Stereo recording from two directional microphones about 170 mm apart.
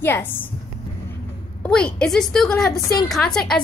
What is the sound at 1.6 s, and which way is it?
A woman's voice, 5° left (ahead or behind).